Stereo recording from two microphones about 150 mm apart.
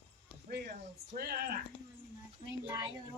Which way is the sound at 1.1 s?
90° right.